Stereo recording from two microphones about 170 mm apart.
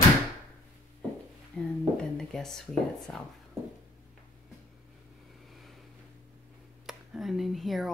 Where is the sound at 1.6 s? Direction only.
5° left (ahead or behind).